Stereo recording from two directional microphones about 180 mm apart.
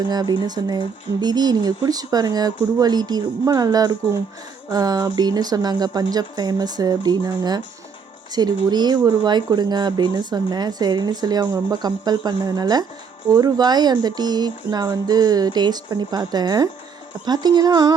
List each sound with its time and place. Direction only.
0.1 s speech: 25° right (ahead or behind)